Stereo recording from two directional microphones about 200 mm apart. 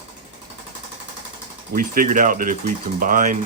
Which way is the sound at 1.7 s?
40° right (ahead or behind).